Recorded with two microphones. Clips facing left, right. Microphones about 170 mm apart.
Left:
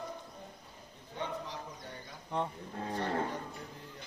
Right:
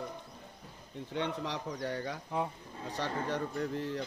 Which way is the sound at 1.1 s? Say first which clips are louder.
Right 4 dB; 75° right (ahead or behind).